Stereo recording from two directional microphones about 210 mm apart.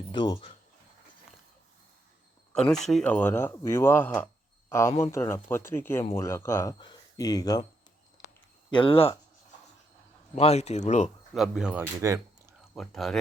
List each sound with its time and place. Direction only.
0.1 s speech: 20° left (ahead or behind)
2.5 s a man's voice: 5° left (ahead or behind)
8.7 s speech: 25° left (ahead or behind)
10.3 s speech: 30° left (ahead or behind)
11.3 s speech: centre (ahead or behind)
12.7 s speech: centre (ahead or behind)